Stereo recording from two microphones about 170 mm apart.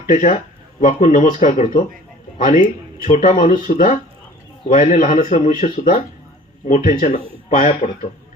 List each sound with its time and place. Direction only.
0.1 s a man's voice: 50° left (ahead or behind)